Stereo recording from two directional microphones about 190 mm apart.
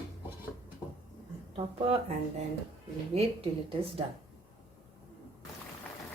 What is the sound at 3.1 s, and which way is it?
Speech, 30° right (ahead or behind).